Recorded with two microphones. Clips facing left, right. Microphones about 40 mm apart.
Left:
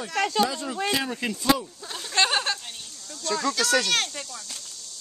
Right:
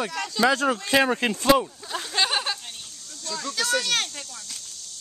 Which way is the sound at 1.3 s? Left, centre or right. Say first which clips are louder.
Right 4 dB; right.